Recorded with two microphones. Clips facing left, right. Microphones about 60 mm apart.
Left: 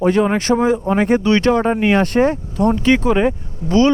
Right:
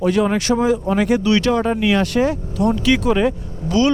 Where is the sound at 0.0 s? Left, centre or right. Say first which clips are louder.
Left 2 dB; left.